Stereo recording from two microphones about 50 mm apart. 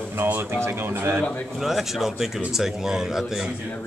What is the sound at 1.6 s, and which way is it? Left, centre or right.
Speech, centre.